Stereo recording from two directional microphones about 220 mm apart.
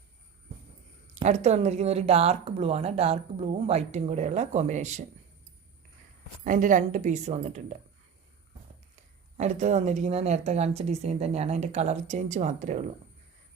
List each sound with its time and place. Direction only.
1.1 s speech: 30° right (ahead or behind)
6.4 s speech: 35° right (ahead or behind)
9.4 s speech: 30° right (ahead or behind)